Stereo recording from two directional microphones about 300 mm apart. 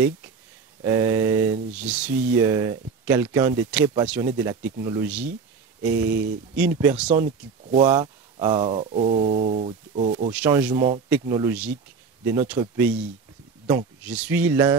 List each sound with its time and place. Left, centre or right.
0.8 s mantra: centre
1.9 s speech: centre
8.5 s speech: right
10.3 s speech: centre
10.9 s mantra: centre
13.7 s speech: centre